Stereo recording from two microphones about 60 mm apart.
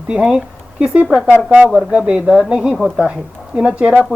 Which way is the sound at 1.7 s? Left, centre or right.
Centre.